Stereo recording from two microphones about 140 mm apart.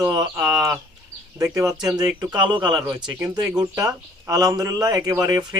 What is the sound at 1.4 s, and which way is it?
Speech, 25° right (ahead or behind).